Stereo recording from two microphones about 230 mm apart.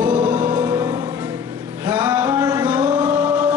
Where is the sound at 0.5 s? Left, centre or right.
Centre.